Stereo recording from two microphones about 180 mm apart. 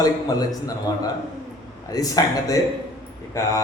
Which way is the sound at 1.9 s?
20° left (ahead or behind).